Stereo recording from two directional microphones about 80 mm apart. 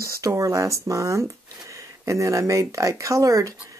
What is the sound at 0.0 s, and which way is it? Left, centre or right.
A woman's voice, right.